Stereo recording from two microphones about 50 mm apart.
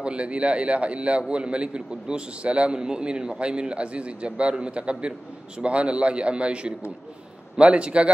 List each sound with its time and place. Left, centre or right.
0.0 s a man's voice: right